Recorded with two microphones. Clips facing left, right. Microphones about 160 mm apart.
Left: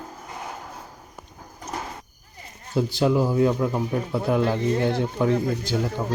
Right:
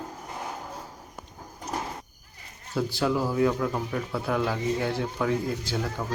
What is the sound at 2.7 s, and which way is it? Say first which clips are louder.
A child's voice: left 5 dB; 20° left (ahead or behind).